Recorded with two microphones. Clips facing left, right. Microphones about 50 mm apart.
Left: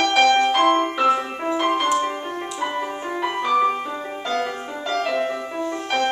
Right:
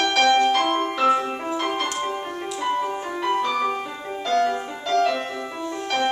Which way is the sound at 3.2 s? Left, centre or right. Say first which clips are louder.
Left 3 dB; centre.